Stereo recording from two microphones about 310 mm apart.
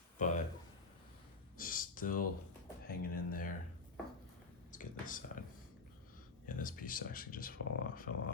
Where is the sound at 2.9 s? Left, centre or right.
Left.